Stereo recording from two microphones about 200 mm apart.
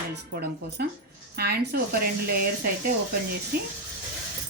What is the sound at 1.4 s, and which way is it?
Speech, 50° right (ahead or behind).